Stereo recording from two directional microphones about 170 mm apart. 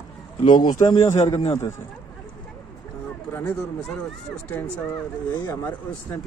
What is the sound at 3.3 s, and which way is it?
Speech, 15° left (ahead or behind).